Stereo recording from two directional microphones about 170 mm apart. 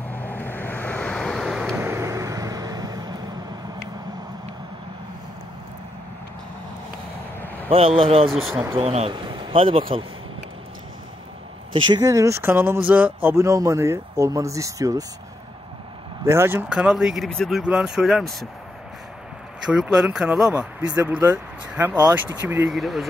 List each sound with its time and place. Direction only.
0.1 s waves: 10° left (ahead or behind)
1.8 s vehicle: 15° right (ahead or behind)
7.4 s a sound: 10° left (ahead or behind)
7.7 s speech: 35° right (ahead or behind)
8.3 s speech: centre (ahead or behind)
8.7 s speech: 35° right (ahead or behind)
11.7 s speech: 25° right (ahead or behind)
16.3 s speech: 15° right (ahead or behind)
19.6 s speech: 5° right (ahead or behind)
22.7 s speech: centre (ahead or behind)